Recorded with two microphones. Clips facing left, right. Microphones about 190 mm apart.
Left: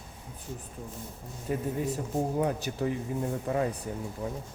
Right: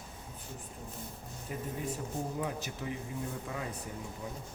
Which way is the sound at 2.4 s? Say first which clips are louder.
Left 8 dB; 45° left (ahead or behind).